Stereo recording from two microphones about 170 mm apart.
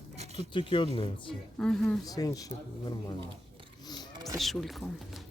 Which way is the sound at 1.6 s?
5° left (ahead or behind).